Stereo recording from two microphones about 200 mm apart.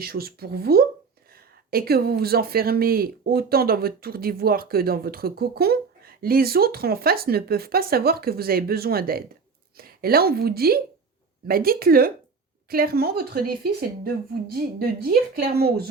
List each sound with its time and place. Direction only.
0.0 s speech: 50° right (ahead or behind)